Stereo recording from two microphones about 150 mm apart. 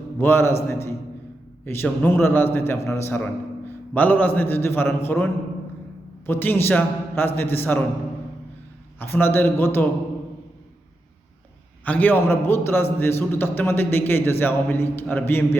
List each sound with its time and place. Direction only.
0.2 s a man's voice: 15° left (ahead or behind)
9.0 s a man's voice: 15° left (ahead or behind)
11.9 s a man's voice: 10° left (ahead or behind)